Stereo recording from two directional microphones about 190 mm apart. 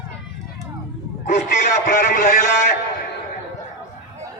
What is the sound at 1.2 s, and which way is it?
A man's voice, 40° left (ahead or behind).